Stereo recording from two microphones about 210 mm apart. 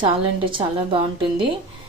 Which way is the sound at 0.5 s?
25° right (ahead or behind).